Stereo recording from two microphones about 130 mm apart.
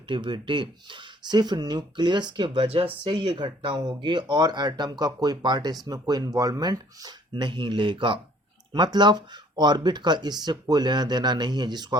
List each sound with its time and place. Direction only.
0.1 s speech: 35° right (ahead or behind)